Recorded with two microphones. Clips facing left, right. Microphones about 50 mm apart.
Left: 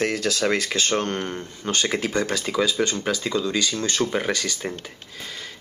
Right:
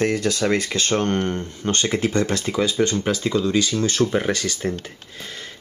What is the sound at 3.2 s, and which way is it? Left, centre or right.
Speech, centre.